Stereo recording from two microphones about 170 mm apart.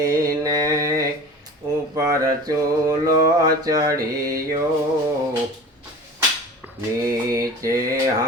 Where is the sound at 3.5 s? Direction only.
20° right (ahead or behind).